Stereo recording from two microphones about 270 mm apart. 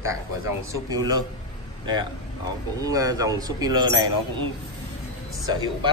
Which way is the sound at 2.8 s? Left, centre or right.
Centre.